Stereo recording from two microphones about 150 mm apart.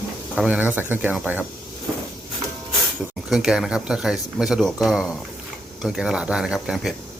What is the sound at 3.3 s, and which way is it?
Speech, 5° right (ahead or behind).